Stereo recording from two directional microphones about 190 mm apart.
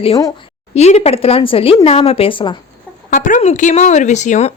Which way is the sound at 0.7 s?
35° left (ahead or behind).